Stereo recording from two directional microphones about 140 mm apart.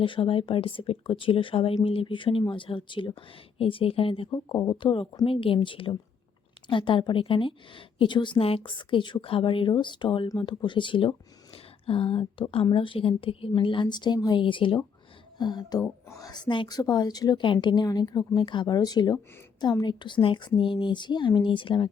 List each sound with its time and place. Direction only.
0.0 s speech: 40° left (ahead or behind)